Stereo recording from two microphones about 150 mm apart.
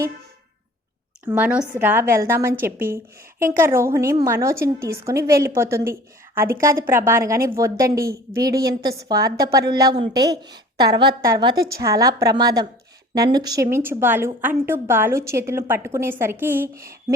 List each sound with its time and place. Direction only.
1.3 s a woman's voice: 10° right (ahead or behind)